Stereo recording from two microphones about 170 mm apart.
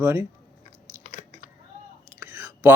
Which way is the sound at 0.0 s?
15° right (ahead or behind).